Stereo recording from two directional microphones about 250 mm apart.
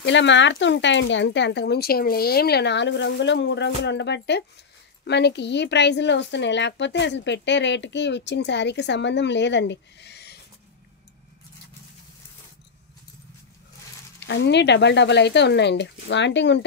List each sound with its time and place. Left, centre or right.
0.0 s a woman's voice: left
14.2 s a woman's voice: left